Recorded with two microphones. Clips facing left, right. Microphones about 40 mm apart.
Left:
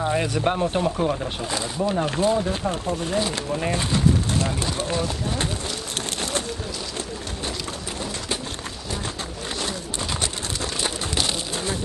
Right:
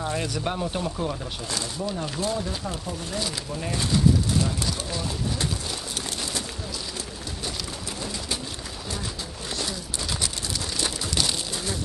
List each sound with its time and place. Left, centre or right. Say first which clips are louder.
0.0 s speech: left 6 dB; left
10.8 s bird: left 1 dB; left